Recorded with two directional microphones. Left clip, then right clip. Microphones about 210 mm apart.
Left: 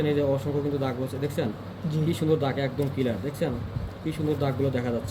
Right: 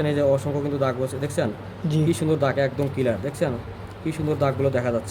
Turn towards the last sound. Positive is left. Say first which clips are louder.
# right 6 dB
turn(degrees=-45)  # may be behind; listen again after turning